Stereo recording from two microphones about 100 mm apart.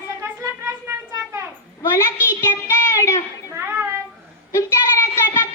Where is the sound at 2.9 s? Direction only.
30° left (ahead or behind).